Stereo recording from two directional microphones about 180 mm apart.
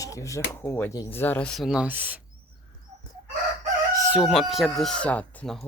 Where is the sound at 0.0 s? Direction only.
20° left (ahead or behind); by 2.2 s 10° right (ahead or behind).